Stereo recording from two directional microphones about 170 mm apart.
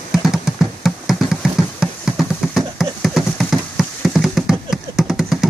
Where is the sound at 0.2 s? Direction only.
Centre (ahead or behind).